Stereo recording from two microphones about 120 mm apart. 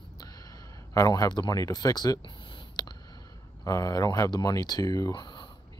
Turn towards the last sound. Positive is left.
turn(degrees=40)  # may be behind; listen again after turning